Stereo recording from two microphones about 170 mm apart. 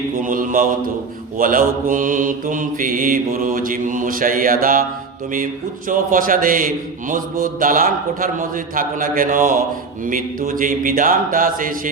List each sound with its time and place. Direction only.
0.2 s mantra: 50° right (ahead or behind)
5.9 s mantra: 55° right (ahead or behind)